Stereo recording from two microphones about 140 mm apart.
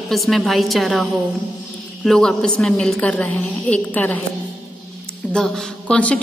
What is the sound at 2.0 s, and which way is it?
A woman's voice, 5° left (ahead or behind).